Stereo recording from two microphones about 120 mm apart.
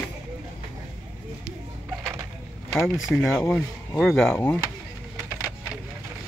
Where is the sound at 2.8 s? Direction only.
Centre (ahead or behind).